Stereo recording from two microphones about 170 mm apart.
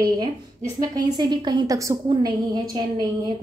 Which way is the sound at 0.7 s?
20° right (ahead or behind).